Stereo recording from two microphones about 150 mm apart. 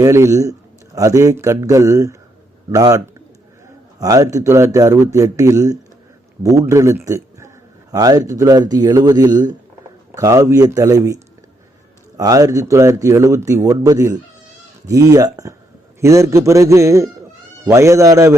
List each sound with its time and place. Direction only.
0.0 s speech: 20° right (ahead or behind)
4.0 s speech: 20° right (ahead or behind)